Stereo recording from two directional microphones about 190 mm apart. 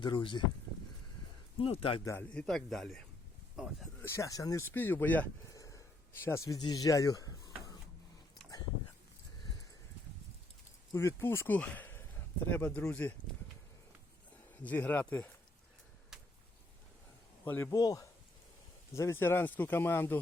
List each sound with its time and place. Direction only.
0.0 s speech: 25° left (ahead or behind)
1.5 s speech: 30° left (ahead or behind)
2.0 s speech: 10° left (ahead or behind)
3.5 s a sound: centre (ahead or behind)
4.0 s speech: 15° left (ahead or behind)
10.9 s speech: 10° left (ahead or behind)
14.5 s speech: 10° left (ahead or behind)
17.4 s speech: 10° left (ahead or behind)